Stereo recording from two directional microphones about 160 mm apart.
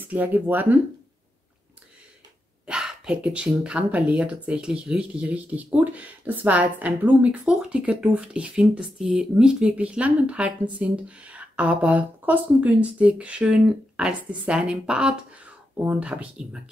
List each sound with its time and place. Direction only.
0.0 s speech: 10° right (ahead or behind)
2.6 s speech: 5° right (ahead or behind)